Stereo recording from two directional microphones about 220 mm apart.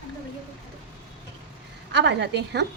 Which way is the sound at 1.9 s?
50° right (ahead or behind).